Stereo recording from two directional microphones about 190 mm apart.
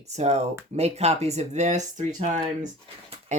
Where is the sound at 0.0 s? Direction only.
35° right (ahead or behind).